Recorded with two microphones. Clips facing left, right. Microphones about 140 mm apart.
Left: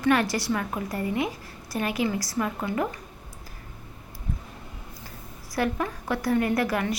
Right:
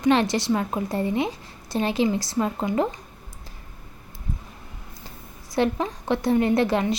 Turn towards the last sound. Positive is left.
turn(degrees=-25)  # may be behind; listen again after turning